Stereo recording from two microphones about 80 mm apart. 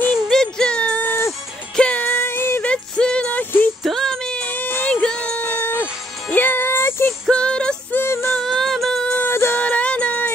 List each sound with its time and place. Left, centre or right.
0.1 s music: centre
1.0 s music: left
1.8 s music: centre; by 2.6 s left
2.6 s music: centre
4.6 s music: left
4.8 s music: centre
5.3 s a sound: centre
7.2 s music: centre
7.9 s music: left
8.4 s music: centre
9.2 s music: left
9.6 s music: centre